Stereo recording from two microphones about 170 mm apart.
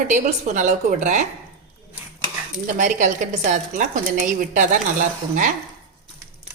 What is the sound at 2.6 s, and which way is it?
Speech, 50° right (ahead or behind).